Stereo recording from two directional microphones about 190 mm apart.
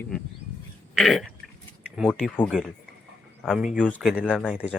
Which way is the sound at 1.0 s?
Centre (ahead or behind).